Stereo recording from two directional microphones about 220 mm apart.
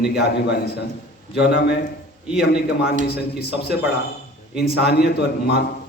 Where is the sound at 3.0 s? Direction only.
50° left (ahead or behind).